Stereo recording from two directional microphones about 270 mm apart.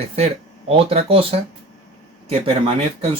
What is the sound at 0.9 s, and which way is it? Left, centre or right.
Speech, right.